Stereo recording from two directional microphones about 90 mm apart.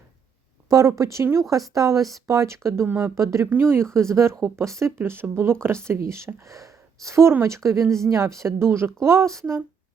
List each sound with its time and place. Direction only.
0.7 s speech: 35° right (ahead or behind)
2.8 s speech: 20° right (ahead or behind)
3.2 s speech: 35° right (ahead or behind)